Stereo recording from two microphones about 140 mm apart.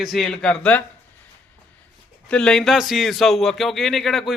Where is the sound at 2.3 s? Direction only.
5° left (ahead or behind).